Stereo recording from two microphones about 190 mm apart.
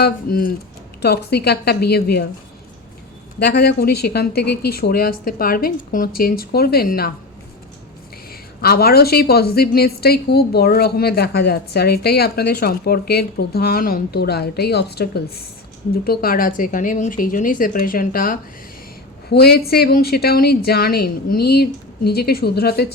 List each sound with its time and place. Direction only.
0.0 s a woman's voice: 50° left (ahead or behind)
3.4 s speech: 55° left (ahead or behind)
8.3 s a woman's voice: 55° left (ahead or behind)